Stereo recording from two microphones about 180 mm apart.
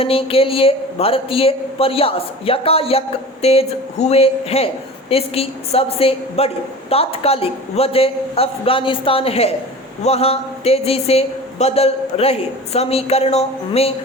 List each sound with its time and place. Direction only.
0.0 s a woman's voice: 30° left (ahead or behind)